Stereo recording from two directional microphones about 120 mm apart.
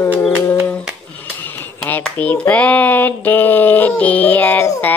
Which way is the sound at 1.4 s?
15° left (ahead or behind).